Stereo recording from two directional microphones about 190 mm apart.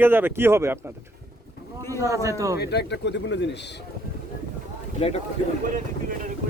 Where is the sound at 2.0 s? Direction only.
15° right (ahead or behind).